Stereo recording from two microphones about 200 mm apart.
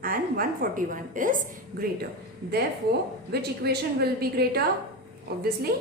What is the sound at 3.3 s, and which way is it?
A woman's voice, 50° right (ahead or behind).